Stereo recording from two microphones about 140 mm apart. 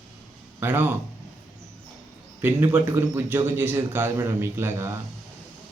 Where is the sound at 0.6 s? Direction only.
15° right (ahead or behind).